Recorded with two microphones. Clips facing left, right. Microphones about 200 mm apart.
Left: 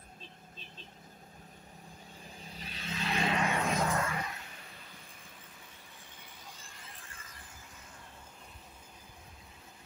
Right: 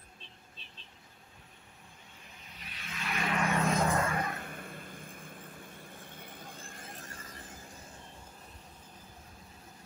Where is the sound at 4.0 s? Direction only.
50° right (ahead or behind).